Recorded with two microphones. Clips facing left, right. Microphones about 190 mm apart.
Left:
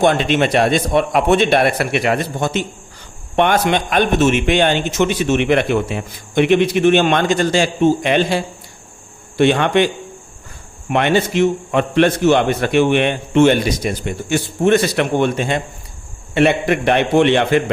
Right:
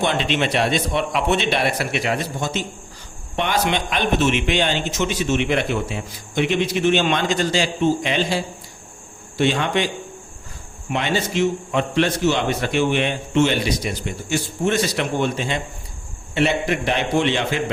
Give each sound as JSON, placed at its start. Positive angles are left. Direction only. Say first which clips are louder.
{"t": 0.0, "sound": "a man's voice", "louder": "left 6 dB", "side_deg": 50}